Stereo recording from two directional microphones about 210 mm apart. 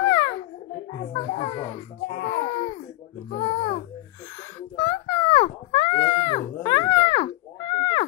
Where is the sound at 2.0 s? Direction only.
45° left (ahead or behind).